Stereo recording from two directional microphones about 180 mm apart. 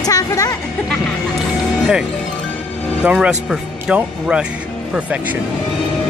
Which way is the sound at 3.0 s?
5° right (ahead or behind).